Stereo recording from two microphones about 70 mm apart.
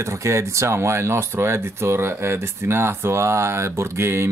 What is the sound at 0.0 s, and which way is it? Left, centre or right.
Speech, right.